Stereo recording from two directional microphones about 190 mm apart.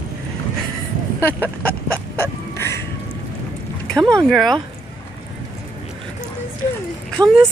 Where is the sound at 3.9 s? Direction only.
20° right (ahead or behind).